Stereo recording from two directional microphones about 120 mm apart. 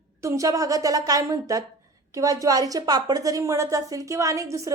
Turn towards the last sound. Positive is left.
turn(degrees=-25)  # may be behind; listen again after turning